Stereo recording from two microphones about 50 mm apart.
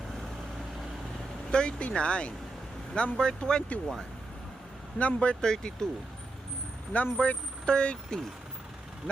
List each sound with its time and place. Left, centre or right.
1.5 s speech: left
4.9 s speech: left
6.9 s speech: left